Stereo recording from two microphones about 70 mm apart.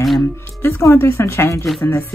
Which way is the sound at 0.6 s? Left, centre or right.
Left.